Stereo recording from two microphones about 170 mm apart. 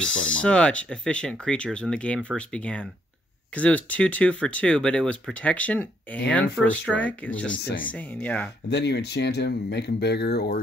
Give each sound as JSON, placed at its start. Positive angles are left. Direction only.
{"t": 0.3, "sound": "speech", "side_deg": 5}
{"t": 7.6, "sound": "speech", "side_deg": 55}
{"t": 7.9, "sound": "speech", "side_deg": 10}
{"t": 8.6, "sound": "speech", "side_deg": 85}